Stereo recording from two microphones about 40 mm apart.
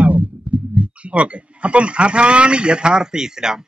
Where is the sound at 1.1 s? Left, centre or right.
Right.